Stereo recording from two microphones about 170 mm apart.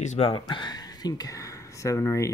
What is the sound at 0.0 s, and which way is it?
Speech, 45° left (ahead or behind).